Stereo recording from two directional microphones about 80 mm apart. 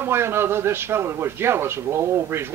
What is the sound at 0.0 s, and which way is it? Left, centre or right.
A man's voice, right.